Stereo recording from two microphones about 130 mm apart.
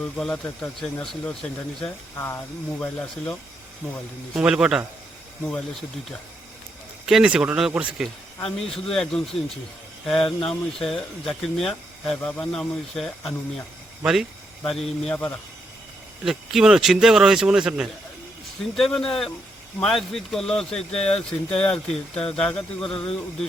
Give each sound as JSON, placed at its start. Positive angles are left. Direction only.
{"t": 0.0, "sound": "speech", "side_deg": 5}
{"t": 2.1, "sound": "speech", "side_deg": 20}
{"t": 4.4, "sound": "speech", "side_deg": -5}
{"t": 7.0, "sound": "speech", "side_deg": -5}
{"t": 8.4, "sound": "speech", "side_deg": 5}
{"t": 16.2, "sound": "speech", "side_deg": -5}
{"t": 20.9, "sound": "speech", "side_deg": 50}
{"t": 21.2, "sound": "speech", "side_deg": 10}